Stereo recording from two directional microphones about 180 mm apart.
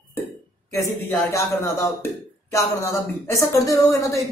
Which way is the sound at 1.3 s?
15° left (ahead or behind).